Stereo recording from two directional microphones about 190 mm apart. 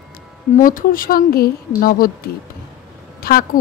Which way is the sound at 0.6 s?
45° left (ahead or behind).